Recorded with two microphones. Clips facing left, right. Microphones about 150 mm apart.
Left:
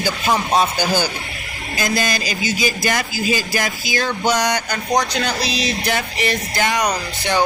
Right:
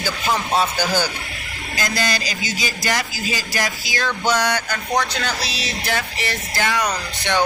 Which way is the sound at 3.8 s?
15° left (ahead or behind).